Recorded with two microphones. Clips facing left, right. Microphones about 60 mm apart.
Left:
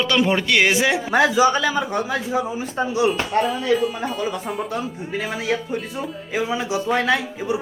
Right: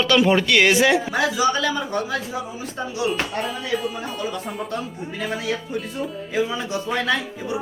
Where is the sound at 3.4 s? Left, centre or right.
Centre.